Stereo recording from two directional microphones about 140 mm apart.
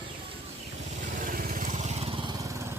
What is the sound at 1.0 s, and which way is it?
Vehicle, 80° right.